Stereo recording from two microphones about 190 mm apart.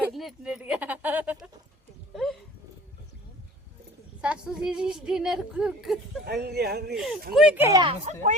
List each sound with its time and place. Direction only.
0.0 s speech: centre (ahead or behind)
2.1 s a sound: centre (ahead or behind)
4.2 s a woman's voice: 5° right (ahead or behind)
6.2 s speech: 55° right (ahead or behind)
6.9 s a woman's voice: 5° right (ahead or behind)
7.8 s speech: 30° right (ahead or behind)